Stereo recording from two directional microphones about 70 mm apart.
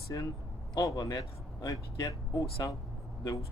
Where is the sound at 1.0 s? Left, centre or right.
Left.